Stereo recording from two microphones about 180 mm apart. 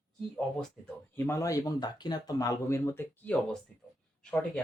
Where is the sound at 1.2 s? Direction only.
15° left (ahead or behind).